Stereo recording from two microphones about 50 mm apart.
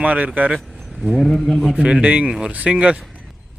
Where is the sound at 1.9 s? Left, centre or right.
Right.